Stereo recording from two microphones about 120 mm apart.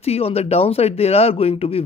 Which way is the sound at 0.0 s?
55° left (ahead or behind).